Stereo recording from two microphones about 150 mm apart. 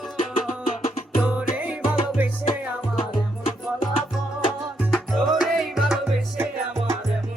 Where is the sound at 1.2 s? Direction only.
10° right (ahead or behind).